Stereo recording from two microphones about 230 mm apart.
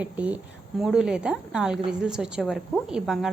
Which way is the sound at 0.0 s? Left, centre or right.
Centre.